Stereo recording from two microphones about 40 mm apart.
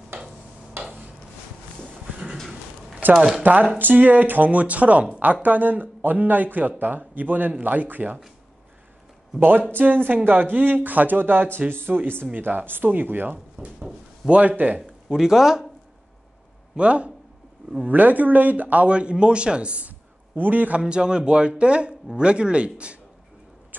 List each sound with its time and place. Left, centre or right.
0.8 s a sound: right
3.0 s speech: right
9.4 s speech: right
11.9 s speech: right
12.4 s speech: right
14.2 s speech: centre
14.6 s speech: right
15.0 s speech: centre
16.7 s speech: right
17.8 s speech: right
18.9 s speech: right
19.9 s a sound: right
20.8 s speech: right